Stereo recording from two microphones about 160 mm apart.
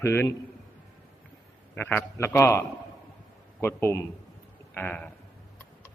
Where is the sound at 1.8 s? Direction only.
15° left (ahead or behind).